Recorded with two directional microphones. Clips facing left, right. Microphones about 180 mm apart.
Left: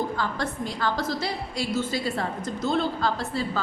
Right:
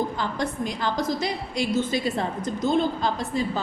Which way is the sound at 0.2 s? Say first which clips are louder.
Right 2 dB; 20° right (ahead or behind).